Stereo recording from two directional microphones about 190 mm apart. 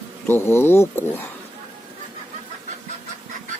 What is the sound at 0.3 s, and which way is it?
Fowl, 10° left (ahead or behind).